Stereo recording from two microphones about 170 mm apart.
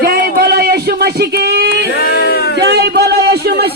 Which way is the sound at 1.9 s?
70° left (ahead or behind).